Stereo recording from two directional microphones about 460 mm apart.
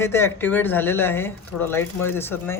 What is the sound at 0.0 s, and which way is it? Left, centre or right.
Speech, centre.